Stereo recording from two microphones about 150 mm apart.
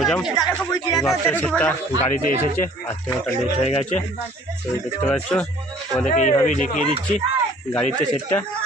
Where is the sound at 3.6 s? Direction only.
45° left (ahead or behind).